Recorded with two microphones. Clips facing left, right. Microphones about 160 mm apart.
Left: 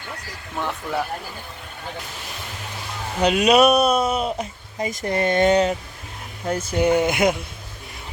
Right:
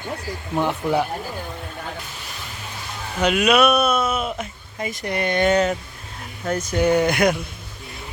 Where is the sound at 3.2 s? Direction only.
30° left (ahead or behind).